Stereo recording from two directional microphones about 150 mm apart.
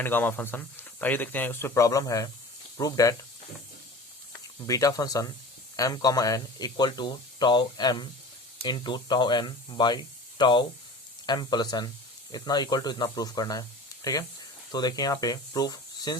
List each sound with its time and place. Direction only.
0.0 s speech: 15° left (ahead or behind)
4.6 s speech: 25° left (ahead or behind)